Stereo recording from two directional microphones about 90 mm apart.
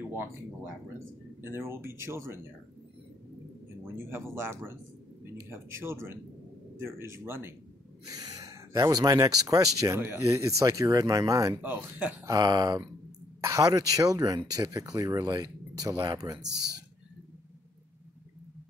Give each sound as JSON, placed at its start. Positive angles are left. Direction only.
{"t": 0.1, "sound": "speech", "side_deg": -25}
{"t": 1.5, "sound": "speech", "side_deg": -25}
{"t": 3.9, "sound": "speech", "side_deg": -25}
{"t": 8.1, "sound": "speech", "side_deg": -40}
{"t": 11.6, "sound": "speech", "side_deg": -20}
{"t": 12.3, "sound": "speech", "side_deg": -50}